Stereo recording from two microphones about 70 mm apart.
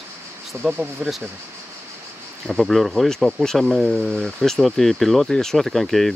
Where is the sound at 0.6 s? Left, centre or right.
Right.